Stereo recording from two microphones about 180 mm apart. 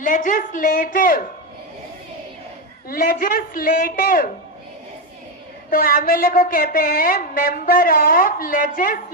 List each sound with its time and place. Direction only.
0.0 s speech: 45° left (ahead or behind)
2.9 s speech: 50° left (ahead or behind)
5.7 s speech: 50° left (ahead or behind)